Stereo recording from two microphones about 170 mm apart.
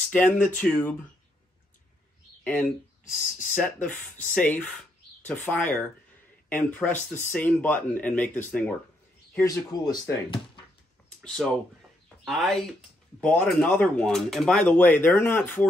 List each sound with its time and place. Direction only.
0.1 s speech: 10° left (ahead or behind)
2.4 s speech: 5° left (ahead or behind)
11.1 s speech: 5° left (ahead or behind)